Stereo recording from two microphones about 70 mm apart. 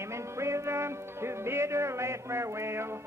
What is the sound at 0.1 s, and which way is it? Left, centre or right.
Music, right.